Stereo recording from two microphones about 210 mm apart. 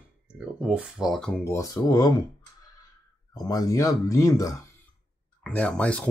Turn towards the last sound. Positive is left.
turn(degrees=5)  # may be behind; listen again after turning